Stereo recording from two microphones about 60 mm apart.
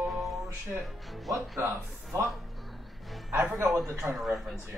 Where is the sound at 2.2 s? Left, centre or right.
Centre.